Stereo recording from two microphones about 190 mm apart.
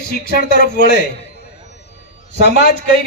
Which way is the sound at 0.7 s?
60° left (ahead or behind).